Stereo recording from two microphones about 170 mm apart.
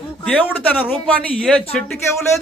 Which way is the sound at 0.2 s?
5° left (ahead or behind).